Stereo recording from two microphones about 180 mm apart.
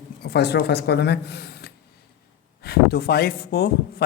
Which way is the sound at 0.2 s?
65° left (ahead or behind).